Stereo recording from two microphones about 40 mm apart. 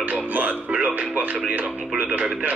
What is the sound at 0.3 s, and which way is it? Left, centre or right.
Music, right.